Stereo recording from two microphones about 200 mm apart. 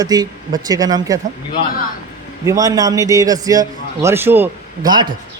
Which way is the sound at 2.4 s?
15° right (ahead or behind).